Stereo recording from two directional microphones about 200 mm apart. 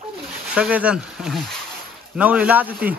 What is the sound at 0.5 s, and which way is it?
Speech, 5° right (ahead or behind).